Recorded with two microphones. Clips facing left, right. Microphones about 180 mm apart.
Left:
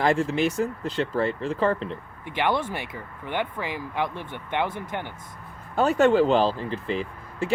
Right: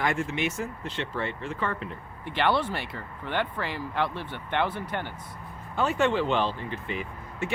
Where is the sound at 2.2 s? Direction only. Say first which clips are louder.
Even; 15° left (ahead or behind).